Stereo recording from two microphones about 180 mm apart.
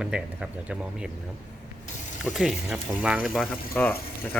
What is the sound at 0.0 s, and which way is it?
Speech, 5° right (ahead or behind).